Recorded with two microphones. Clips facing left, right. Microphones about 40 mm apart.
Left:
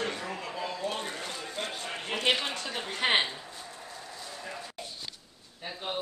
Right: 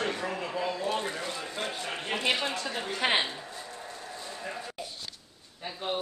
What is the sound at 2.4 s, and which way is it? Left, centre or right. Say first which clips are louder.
Speech: right 2 dB; right.